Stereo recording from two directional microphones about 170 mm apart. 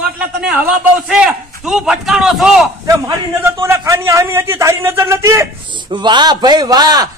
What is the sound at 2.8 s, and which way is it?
A man's voice, 15° right (ahead or behind).